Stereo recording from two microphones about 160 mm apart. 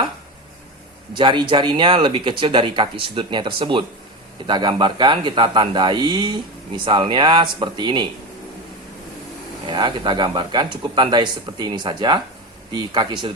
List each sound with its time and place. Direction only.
1.1 s speech: 30° right (ahead or behind)
9.6 s speech: 30° right (ahead or behind)